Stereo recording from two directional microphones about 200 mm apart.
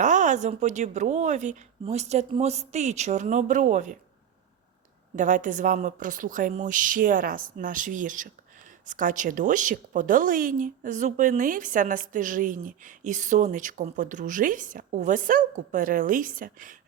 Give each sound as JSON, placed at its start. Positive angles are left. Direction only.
{"t": 0.0, "sound": "a woman's voice", "side_deg": -40}
{"t": 5.1, "sound": "a woman's voice", "side_deg": -40}